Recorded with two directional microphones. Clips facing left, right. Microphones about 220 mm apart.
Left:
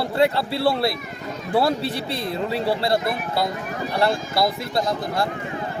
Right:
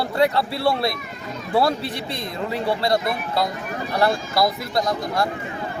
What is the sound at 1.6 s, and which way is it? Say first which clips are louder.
Speech: even; 30° left (ahead or behind).